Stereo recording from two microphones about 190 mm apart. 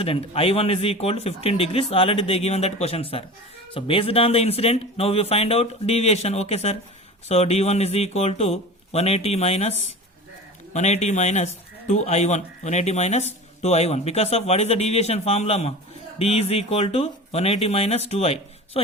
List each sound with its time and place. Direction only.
0.0 s speech: 30° left (ahead or behind)
10.8 s speech: 35° left (ahead or behind)